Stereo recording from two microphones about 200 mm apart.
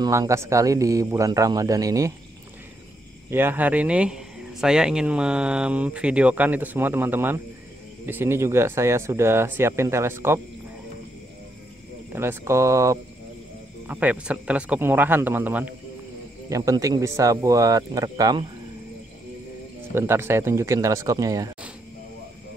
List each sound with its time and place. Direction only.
0.0 s a man's voice: 15° right (ahead or behind)
3.3 s a man's voice: 10° right (ahead or behind)
12.1 s a man's voice: 10° right (ahead or behind)
19.9 s a man's voice: 10° right (ahead or behind)